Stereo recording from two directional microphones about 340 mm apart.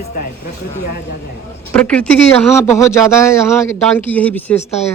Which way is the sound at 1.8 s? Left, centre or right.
Centre.